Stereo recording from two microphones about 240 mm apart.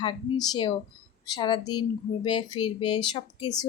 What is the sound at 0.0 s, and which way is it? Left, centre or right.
Speech, centre.